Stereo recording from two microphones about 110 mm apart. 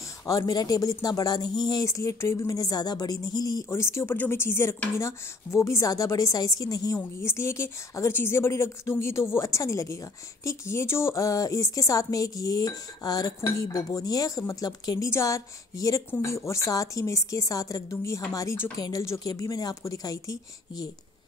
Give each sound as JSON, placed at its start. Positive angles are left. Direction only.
{"t": 0.3, "sound": "a woman's voice", "side_deg": 35}
{"t": 3.7, "sound": "a woman's voice", "side_deg": 25}